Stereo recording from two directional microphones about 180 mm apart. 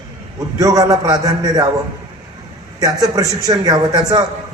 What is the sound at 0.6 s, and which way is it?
A man's voice, 20° right (ahead or behind).